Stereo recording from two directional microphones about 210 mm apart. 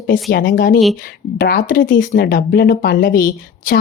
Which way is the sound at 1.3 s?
40° left (ahead or behind).